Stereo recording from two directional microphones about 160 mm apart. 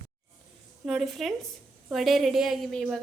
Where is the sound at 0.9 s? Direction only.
Centre (ahead or behind).